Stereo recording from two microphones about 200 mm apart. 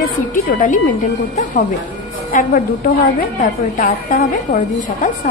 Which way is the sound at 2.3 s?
45° left (ahead or behind).